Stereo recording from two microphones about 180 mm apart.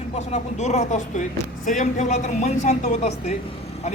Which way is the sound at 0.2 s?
40° left (ahead or behind).